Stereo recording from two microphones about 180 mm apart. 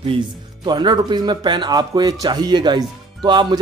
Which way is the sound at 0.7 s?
25° right (ahead or behind).